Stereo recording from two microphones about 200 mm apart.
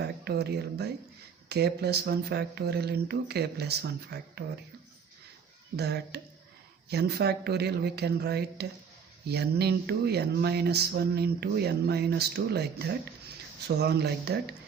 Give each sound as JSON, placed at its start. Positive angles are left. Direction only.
{"t": 0.0, "sound": "speech", "side_deg": -55}
{"t": 5.7, "sound": "speech", "side_deg": -55}